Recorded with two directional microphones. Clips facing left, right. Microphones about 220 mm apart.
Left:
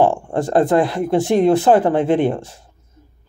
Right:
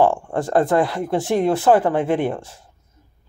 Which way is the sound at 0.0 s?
20° left (ahead or behind).